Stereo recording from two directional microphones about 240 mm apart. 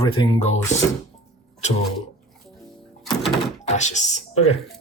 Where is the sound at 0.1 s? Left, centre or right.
Left.